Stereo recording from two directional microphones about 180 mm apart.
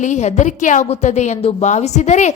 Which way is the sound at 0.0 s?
40° left (ahead or behind).